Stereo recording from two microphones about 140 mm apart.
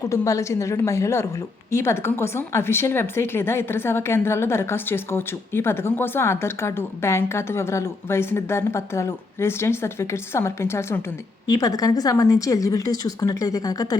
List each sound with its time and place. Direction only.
0.0 s a woman's voice: 20° left (ahead or behind)